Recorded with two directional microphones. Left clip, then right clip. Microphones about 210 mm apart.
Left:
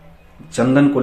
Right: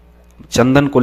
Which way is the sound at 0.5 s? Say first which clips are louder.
Right 3 dB; 50° right (ahead or behind).